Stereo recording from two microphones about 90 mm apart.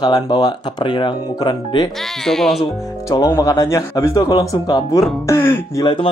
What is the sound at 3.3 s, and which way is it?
Speech, 40° left (ahead or behind).